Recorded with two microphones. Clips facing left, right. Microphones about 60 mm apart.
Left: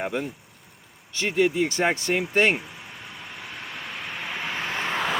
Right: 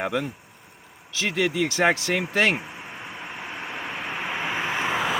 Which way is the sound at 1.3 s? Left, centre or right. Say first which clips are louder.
Left 2 dB; right.